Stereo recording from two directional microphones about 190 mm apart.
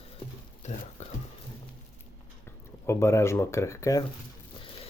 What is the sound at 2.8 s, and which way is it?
Speech, 15° left (ahead or behind).